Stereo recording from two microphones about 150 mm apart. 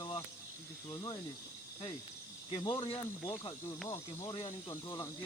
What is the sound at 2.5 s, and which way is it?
Speech, 30° left (ahead or behind).